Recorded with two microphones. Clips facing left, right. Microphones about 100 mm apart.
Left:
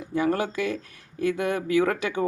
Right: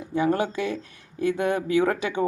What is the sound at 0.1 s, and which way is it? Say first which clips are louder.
Speech: right 1 dB; 25° right (ahead or behind).